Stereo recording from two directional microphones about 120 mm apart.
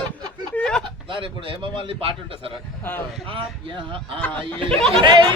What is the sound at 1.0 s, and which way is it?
Speech, 45° right (ahead or behind).